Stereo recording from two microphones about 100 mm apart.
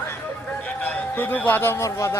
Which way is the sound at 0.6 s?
15° left (ahead or behind).